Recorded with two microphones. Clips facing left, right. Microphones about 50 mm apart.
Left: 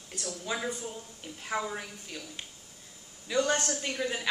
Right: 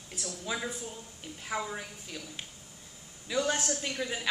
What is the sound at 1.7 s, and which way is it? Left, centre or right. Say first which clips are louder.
A woman's voice: left 2 dB; centre.